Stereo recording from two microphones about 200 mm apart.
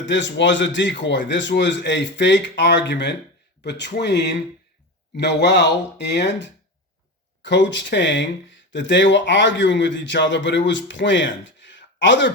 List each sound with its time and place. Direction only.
0.0 s speech: 65° left (ahead or behind)